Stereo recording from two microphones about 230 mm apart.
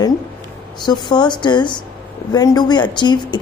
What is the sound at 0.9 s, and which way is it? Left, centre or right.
A woman's voice, centre.